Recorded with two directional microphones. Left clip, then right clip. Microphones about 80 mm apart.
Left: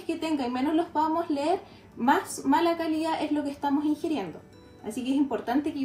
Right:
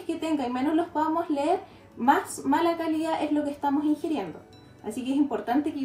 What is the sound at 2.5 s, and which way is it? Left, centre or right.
A woman's voice, right.